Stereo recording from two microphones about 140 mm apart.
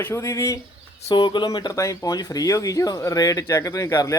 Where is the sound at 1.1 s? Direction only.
30° left (ahead or behind).